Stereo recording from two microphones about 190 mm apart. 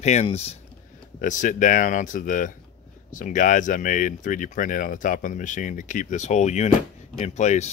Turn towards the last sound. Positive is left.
turn(degrees=35)  # may be behind; listen again after turning